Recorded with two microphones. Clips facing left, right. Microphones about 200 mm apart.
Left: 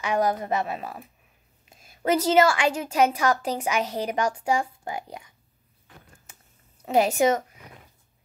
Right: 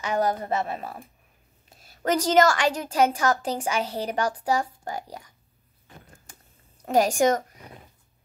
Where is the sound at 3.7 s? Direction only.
30° right (ahead or behind).